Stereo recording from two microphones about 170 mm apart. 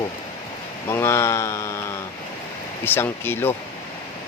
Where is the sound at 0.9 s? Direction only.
15° left (ahead or behind).